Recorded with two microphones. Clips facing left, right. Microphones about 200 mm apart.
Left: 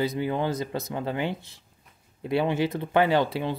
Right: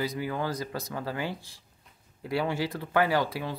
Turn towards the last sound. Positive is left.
turn(degrees=25)  # may be behind; listen again after turning